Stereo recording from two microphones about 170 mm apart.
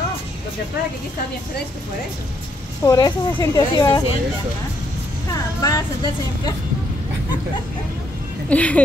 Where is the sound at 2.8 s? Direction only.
20° left (ahead or behind).